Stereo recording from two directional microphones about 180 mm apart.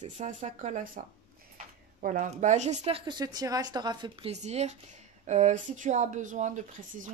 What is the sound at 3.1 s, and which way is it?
Speech, 25° right (ahead or behind).